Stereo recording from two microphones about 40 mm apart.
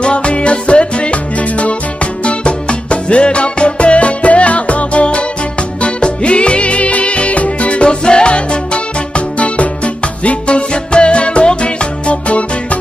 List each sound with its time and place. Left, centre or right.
0.0 s music: left